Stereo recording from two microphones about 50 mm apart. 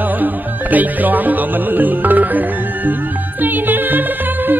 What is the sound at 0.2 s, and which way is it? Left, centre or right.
Music, right.